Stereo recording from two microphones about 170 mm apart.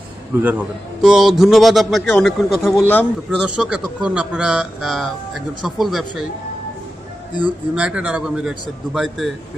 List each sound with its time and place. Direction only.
0.4 s a man's voice: 10° right (ahead or behind)
2.8 s a man's voice: 10° left (ahead or behind)
3.3 s a man's voice: 5° right (ahead or behind)
7.7 s a man's voice: 5° right (ahead or behind)